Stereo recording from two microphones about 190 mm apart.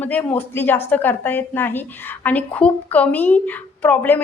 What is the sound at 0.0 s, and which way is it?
A woman's voice, 10° left (ahead or behind).